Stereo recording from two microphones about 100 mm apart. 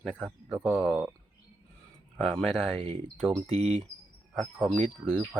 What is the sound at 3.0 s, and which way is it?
Speech, 5° left (ahead or behind).